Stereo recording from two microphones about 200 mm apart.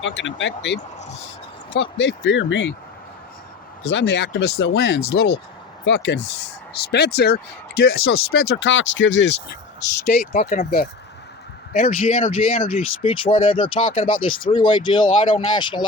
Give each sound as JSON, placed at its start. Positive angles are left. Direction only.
{"t": 0.0, "sound": "speech", "side_deg": 65}
{"t": 3.8, "sound": "speech", "side_deg": 60}
{"t": 10.1, "sound": "speech", "side_deg": 50}
{"t": 12.1, "sound": "speech", "side_deg": 30}